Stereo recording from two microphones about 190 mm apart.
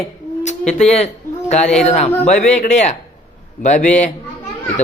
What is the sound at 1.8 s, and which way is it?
A man's voice, 35° left (ahead or behind).